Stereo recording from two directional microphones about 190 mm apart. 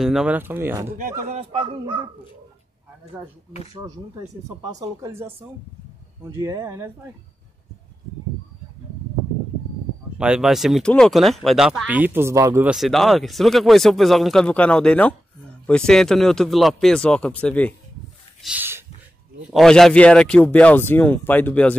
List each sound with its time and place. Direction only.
0.0 s speech: 5° right (ahead or behind)
1.2 s speech: 30° right (ahead or behind)
3.1 s speech: 5° right (ahead or behind)
4.5 s speech: 20° right (ahead or behind)
10.1 s speech: 5° right (ahead or behind)
12.7 s speech: centre (ahead or behind)
18.4 s a sound: 10° right (ahead or behind)
19.5 s speech: centre (ahead or behind)